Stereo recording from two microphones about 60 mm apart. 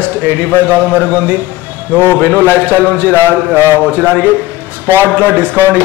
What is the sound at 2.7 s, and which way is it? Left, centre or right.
A man's voice, right.